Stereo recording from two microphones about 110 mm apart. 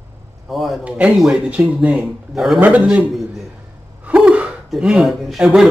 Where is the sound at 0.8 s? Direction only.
10° right (ahead or behind).